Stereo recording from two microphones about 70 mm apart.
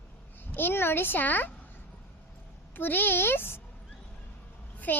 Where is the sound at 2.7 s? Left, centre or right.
Left.